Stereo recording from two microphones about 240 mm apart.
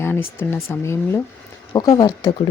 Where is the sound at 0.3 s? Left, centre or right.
Centre.